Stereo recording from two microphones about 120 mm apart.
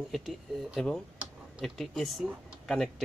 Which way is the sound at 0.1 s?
Centre (ahead or behind).